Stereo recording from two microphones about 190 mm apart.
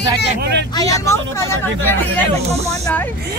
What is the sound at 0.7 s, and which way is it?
Speech, 15° left (ahead or behind).